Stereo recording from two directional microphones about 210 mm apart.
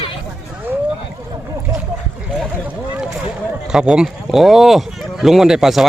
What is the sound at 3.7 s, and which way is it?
Speech, 5° right (ahead or behind).